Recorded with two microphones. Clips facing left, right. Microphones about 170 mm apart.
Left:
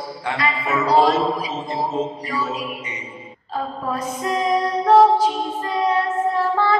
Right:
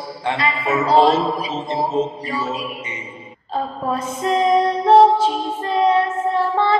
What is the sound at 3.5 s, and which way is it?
Music, 25° right (ahead or behind).